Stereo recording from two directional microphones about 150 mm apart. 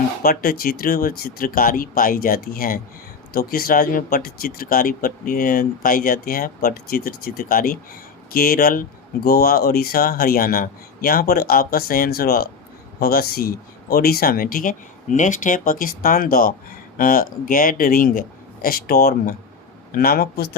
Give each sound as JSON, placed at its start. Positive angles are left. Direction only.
{"t": 0.2, "sound": "speech", "side_deg": 90}
{"t": 8.3, "sound": "a man's voice", "side_deg": 85}